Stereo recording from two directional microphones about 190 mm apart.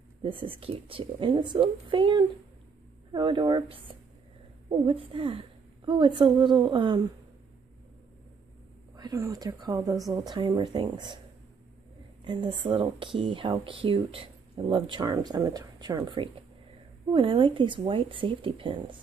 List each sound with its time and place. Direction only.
0.2 s speech: 30° right (ahead or behind)
8.9 s speech: 20° right (ahead or behind)
12.3 s speech: 25° right (ahead or behind)